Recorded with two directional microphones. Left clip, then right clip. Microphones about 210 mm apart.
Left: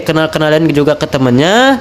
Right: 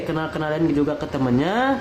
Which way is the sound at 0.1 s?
50° left (ahead or behind).